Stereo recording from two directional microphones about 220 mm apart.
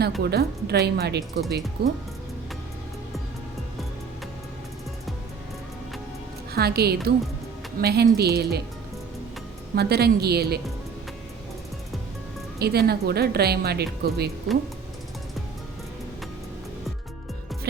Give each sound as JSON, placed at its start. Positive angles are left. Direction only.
{"t": 0.2, "sound": "speech", "side_deg": -45}
{"t": 6.5, "sound": "a woman's voice", "side_deg": -45}
{"t": 9.7, "sound": "speech", "side_deg": -45}
{"t": 12.5, "sound": "speech", "side_deg": -45}